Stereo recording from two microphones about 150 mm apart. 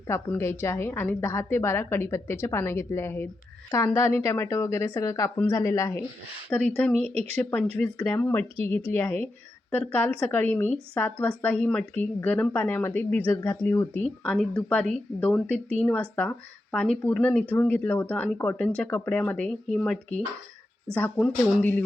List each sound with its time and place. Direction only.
0.1 s a woman's voice: 15° left (ahead or behind)
6.5 s a woman's voice: 10° left (ahead or behind)